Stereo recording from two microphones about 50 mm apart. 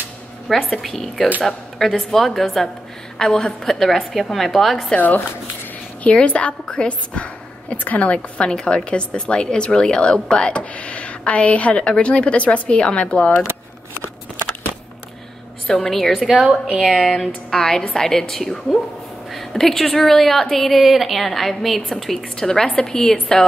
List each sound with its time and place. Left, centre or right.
0.5 s a woman's voice: centre
3.2 s a woman's voice: centre
4.9 s speech: left
6.0 s a woman's voice: left
15.6 s a woman's voice: centre
16.3 s a woman's voice: centre
17.1 s a woman's voice: centre